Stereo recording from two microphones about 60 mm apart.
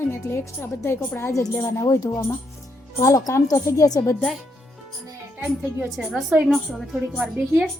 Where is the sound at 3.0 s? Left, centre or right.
Left.